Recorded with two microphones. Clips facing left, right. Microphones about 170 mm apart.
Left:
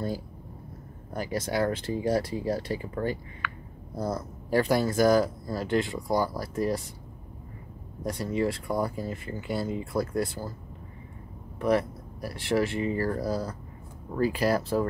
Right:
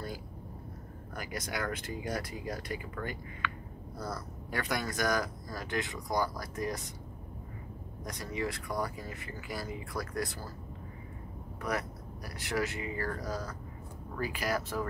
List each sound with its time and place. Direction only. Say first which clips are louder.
1.1 s speech: left 9 dB; 30° left (ahead or behind)
8.0 s speech: left 9 dB; 30° left (ahead or behind)
11.6 s speech: left 10 dB; 30° left (ahead or behind)